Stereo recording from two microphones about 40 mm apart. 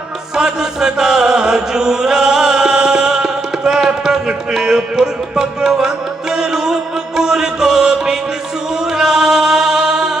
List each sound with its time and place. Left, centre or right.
0.3 s chant: centre
3.6 s a sound: centre
6.3 s music: centre
7.2 s mantra: centre
8.9 s music: centre